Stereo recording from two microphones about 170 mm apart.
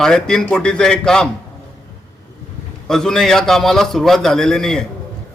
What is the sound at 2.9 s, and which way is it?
A man's voice, 5° left (ahead or behind).